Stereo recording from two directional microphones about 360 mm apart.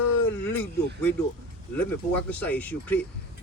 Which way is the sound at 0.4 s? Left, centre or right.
Centre.